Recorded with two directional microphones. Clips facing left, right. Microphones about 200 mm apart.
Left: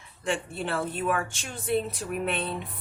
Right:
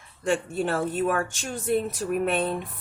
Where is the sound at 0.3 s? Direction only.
45° right (ahead or behind).